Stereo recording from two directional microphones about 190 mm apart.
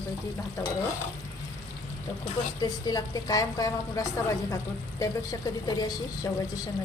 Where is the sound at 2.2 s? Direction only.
20° left (ahead or behind).